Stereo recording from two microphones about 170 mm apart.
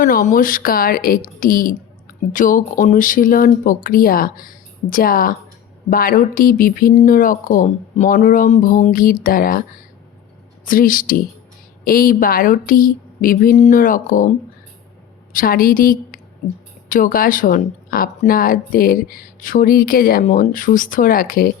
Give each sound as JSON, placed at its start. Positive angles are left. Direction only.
{"t": 0.0, "sound": "speech", "side_deg": 50}
{"t": 10.7, "sound": "speech", "side_deg": 55}
{"t": 15.3, "sound": "a woman's voice", "side_deg": 55}